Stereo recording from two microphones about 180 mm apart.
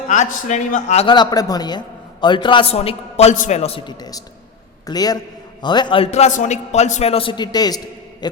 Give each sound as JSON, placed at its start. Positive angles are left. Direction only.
{"t": 0.1, "sound": "a man's voice", "side_deg": 40}
{"t": 1.0, "sound": "a man's voice", "side_deg": 25}